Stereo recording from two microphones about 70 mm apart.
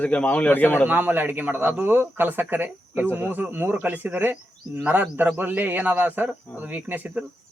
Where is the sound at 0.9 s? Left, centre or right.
Right.